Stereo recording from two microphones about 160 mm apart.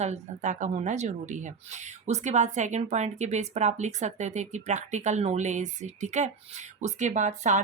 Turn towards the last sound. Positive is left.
turn(degrees=-50)  # may be behind; listen again after turning